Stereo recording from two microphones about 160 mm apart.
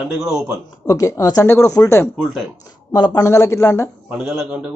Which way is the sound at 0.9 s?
20° left (ahead or behind).